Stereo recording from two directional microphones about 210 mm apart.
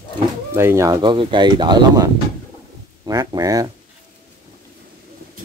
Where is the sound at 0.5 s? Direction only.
15° right (ahead or behind).